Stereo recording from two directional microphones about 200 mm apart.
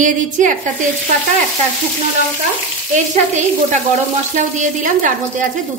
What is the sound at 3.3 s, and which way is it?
A woman's voice, 35° right (ahead or behind).